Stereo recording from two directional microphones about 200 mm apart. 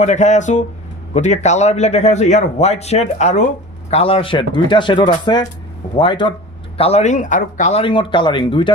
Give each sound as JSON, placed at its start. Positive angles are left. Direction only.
{"t": 0.0, "sound": "a man's voice", "side_deg": 35}
{"t": 7.8, "sound": "speech", "side_deg": 25}